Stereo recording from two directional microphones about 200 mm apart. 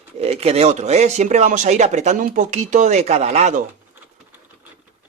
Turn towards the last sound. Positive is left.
turn(degrees=-35)  # may be behind; listen again after turning